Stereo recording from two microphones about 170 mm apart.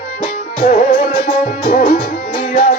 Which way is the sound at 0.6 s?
50° left (ahead or behind).